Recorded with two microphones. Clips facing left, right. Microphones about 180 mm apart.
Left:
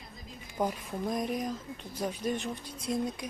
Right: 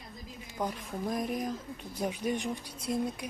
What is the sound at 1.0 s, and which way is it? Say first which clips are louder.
Speech: left 1 dB; centre (ahead or behind).